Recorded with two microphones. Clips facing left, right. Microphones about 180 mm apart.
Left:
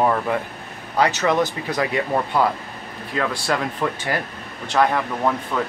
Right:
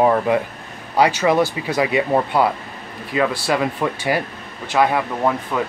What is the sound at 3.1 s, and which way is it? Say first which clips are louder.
Speech: right 4 dB; 10° right (ahead or behind).